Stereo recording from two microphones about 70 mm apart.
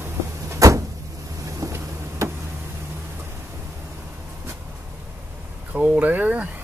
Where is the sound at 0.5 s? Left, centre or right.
Right.